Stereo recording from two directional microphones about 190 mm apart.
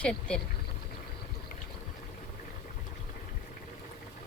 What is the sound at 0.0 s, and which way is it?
Speech, 5° left (ahead or behind).